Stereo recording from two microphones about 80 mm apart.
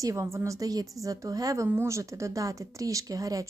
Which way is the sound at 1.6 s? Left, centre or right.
Right.